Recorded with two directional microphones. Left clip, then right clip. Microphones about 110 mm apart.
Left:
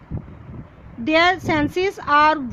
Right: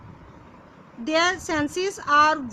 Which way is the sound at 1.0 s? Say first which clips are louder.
Left 5 dB; 40° left (ahead or behind).